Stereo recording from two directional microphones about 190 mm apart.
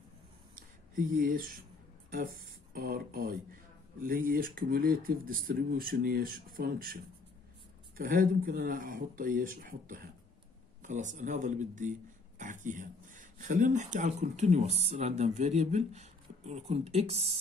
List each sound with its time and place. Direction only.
0.6 s a sound: 45° right (ahead or behind)
2.7 s speech: 50° right (ahead or behind)
8.0 s speech: 45° right (ahead or behind)